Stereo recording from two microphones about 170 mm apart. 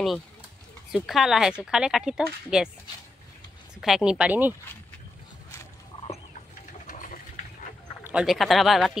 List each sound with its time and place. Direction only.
0.9 s speech: centre (ahead or behind)
3.8 s speech: 5° right (ahead or behind)
6.9 s sewing machine: 50° left (ahead or behind)
8.0 s speech: 5° right (ahead or behind)